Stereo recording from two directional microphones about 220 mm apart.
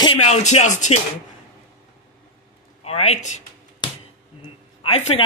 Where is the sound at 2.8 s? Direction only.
30° left (ahead or behind).